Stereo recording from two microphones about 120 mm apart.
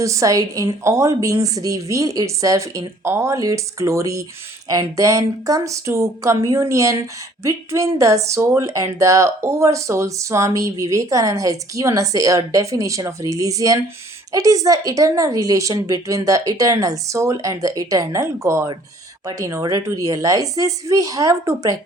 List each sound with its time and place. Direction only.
0.0 s speech: 25° right (ahead or behind)